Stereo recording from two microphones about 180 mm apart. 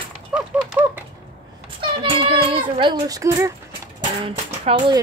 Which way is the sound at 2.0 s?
30° right (ahead or behind).